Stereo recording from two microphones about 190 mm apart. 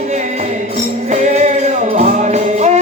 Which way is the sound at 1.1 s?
40° right (ahead or behind).